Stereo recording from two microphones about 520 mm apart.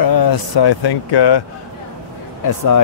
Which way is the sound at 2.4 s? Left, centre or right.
Left.